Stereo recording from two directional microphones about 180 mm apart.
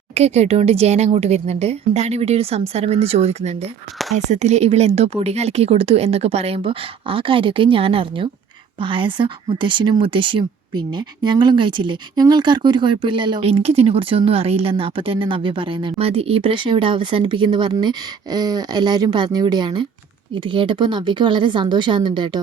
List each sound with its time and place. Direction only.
0.1 s a woman's voice: 35° right (ahead or behind)